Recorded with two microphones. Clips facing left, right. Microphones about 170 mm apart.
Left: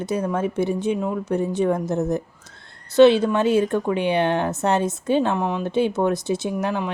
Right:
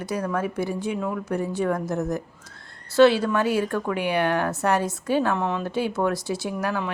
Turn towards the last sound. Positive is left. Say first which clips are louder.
# left 3 dB
turn(degrees=20)  # may be behind; listen again after turning